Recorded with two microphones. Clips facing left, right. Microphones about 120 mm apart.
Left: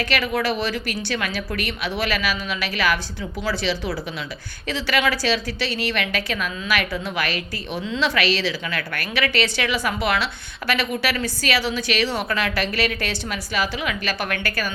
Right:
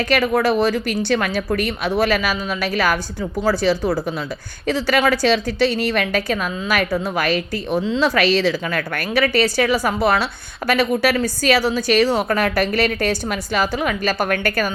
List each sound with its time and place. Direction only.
0.0 s a woman's voice: 45° right (ahead or behind)